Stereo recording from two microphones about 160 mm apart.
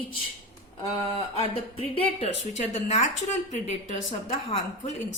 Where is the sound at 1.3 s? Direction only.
35° left (ahead or behind); by 4.9 s 50° left (ahead or behind).